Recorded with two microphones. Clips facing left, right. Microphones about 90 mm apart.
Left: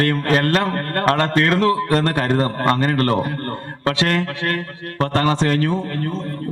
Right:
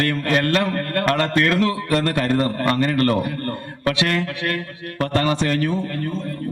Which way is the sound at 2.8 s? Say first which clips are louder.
Even; 40° left (ahead or behind).